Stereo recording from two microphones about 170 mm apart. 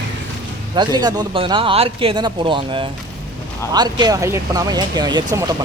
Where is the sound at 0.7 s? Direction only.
25° right (ahead or behind).